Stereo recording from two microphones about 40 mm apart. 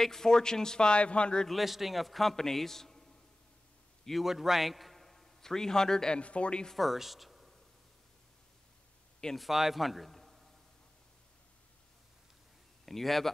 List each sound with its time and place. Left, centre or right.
0.0 s speech: centre
1.5 s a man's voice: centre
4.2 s a man's voice: centre
6.1 s speech: left
6.7 s speech: centre
9.3 s a man's voice: centre
12.8 s a man's voice: centre